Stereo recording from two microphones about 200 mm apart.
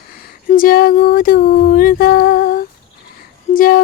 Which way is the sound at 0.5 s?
45° left (ahead or behind).